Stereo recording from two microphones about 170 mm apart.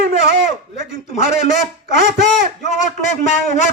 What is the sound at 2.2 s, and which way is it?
A man's voice, 45° left (ahead or behind).